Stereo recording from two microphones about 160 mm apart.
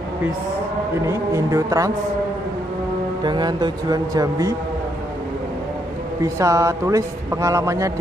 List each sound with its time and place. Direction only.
1.0 s a man's voice: 20° right (ahead or behind)
3.3 s a man's voice: 25° right (ahead or behind)
6.2 s a man's voice: 20° right (ahead or behind)